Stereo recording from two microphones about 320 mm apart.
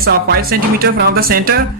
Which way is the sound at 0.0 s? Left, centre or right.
Right.